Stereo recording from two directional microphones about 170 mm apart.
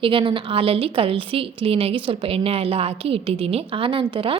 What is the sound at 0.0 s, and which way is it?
Speech, 30° right (ahead or behind).